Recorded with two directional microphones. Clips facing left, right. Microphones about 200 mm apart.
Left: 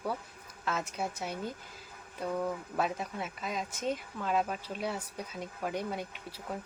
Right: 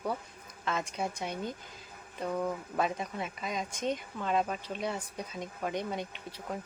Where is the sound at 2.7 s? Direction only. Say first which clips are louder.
Right 2 dB; 5° left (ahead or behind).